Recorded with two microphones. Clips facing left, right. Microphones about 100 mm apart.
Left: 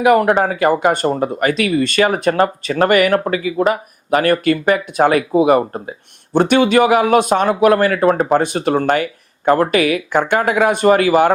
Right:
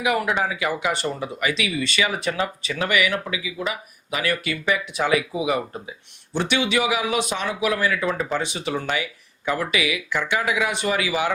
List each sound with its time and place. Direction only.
0.0 s speech: 50° left (ahead or behind)